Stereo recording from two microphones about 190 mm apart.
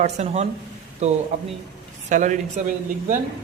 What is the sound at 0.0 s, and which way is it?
Speech, 35° right (ahead or behind).